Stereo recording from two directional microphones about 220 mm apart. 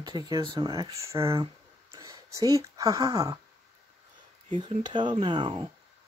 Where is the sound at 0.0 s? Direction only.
15° right (ahead or behind).